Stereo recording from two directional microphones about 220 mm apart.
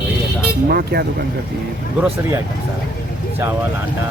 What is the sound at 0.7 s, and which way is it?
Speech, 45° right (ahead or behind).